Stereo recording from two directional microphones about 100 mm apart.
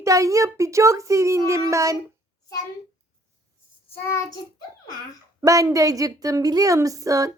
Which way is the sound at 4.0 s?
30° left (ahead or behind).